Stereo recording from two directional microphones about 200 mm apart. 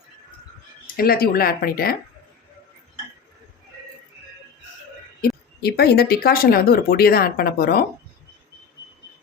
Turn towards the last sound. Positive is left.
turn(degrees=50)  # may be behind; listen again after turning